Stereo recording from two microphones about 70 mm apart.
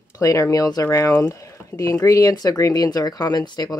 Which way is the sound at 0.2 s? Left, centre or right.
Left.